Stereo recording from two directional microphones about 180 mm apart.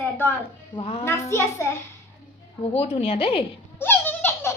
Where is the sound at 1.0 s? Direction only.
15° left (ahead or behind).